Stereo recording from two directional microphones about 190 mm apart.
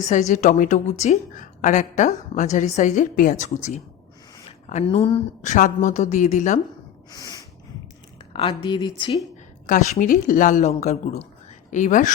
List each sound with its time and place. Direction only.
0.0 s a woman's voice: 40° left (ahead or behind)
7.1 s snort: 20° left (ahead or behind)
8.3 s speech: 25° left (ahead or behind)
9.6 s a woman's voice: 40° left (ahead or behind)